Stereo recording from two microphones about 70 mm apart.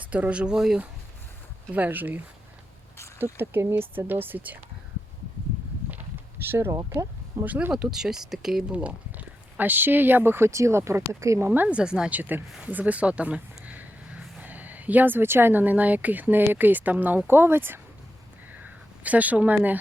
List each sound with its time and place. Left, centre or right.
0.0 s speech: right
1.7 s speech: right
3.3 s speech: right
6.4 s speech: right
6.7 s speech: right
7.4 s speech: right
7.7 s speech: centre
8.7 s speech: centre
11.8 s speech: centre
12.1 s speech: right
18.6 s speech: right